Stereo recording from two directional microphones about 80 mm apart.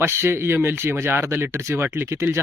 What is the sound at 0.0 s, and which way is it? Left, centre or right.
Speech, right.